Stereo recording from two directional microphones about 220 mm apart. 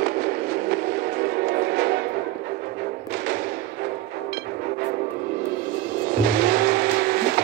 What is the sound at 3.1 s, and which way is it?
Thump, 45° right (ahead or behind).